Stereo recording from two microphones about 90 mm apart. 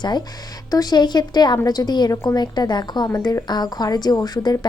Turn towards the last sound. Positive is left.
turn(degrees=50)  # may be behind; listen again after turning